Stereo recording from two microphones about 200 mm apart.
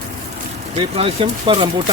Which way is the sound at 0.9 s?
30° right (ahead or behind).